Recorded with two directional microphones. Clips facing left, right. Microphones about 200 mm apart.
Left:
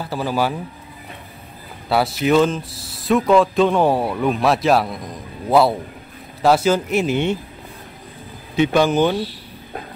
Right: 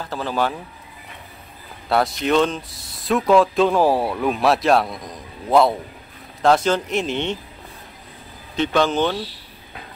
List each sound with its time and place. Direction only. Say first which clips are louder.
0.0 s speech: left 2 dB; 10° left (ahead or behind)
1.9 s speech: left 2 dB; 5° left (ahead or behind)
8.5 s speech: left 3 dB; 10° left (ahead or behind)